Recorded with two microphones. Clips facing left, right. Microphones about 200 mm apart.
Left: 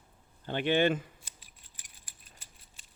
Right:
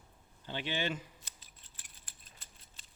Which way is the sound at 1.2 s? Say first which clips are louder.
Left 1 dB; 10° left (ahead or behind).